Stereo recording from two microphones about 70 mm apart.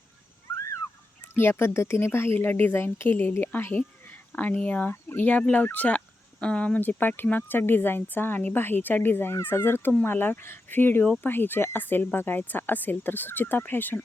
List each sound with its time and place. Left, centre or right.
0.4 s a sound: left
1.4 s speech: left; by 6.7 s centre
6.7 s speech: left